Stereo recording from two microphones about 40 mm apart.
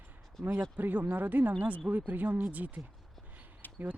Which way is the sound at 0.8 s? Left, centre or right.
Right.